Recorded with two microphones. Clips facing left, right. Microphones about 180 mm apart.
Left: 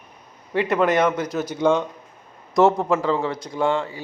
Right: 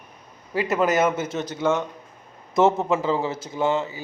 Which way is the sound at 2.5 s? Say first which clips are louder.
Left 2 dB; centre (ahead or behind).